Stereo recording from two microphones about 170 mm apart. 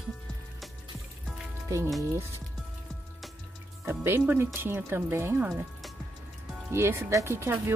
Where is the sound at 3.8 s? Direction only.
15° right (ahead or behind).